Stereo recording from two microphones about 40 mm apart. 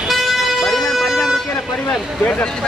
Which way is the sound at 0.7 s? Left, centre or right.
Centre.